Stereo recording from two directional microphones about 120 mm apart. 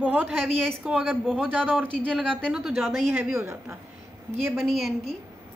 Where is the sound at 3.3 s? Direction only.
25° right (ahead or behind).